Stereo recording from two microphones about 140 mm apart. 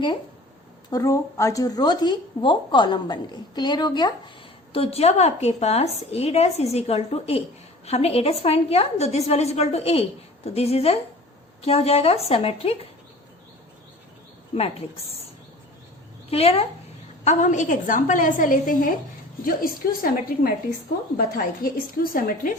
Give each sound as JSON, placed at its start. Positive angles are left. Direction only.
{"t": 0.9, "sound": "a woman's voice", "side_deg": 25}
{"t": 4.7, "sound": "a woman's voice", "side_deg": 45}
{"t": 14.5, "sound": "a woman's voice", "side_deg": 45}
{"t": 16.3, "sound": "a woman's voice", "side_deg": 45}
{"t": 17.2, "sound": "a woman's voice", "side_deg": 65}
{"t": 19.5, "sound": "a woman's voice", "side_deg": 90}